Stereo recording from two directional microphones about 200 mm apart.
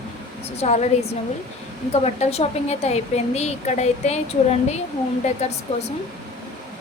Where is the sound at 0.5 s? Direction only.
35° left (ahead or behind).